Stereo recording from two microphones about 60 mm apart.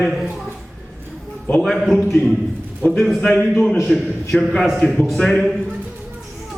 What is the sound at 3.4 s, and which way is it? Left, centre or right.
A man's voice, centre.